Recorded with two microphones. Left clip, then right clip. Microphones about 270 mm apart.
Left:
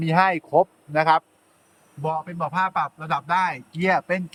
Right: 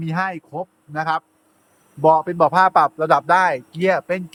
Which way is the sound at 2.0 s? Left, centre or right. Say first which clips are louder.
Right 12 dB; centre.